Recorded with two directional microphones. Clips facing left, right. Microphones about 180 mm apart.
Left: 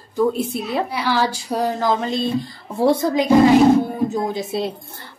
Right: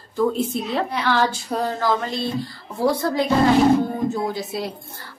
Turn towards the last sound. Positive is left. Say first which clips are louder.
# left 3 dB
turn(degrees=25)  # may be behind; listen again after turning